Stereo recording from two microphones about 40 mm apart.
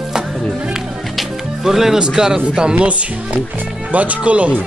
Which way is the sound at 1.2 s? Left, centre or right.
Centre.